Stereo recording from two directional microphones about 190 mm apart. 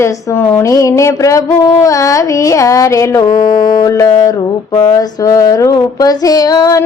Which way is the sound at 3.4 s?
20° left (ahead or behind).